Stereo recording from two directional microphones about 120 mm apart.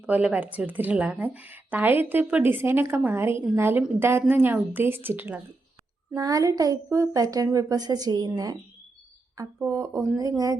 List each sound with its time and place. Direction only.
0.0 s speech: 10° right (ahead or behind)
6.1 s speech: 30° right (ahead or behind)